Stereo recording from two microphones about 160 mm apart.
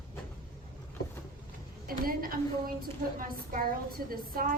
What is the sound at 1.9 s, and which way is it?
A woman's voice, 65° right (ahead or behind).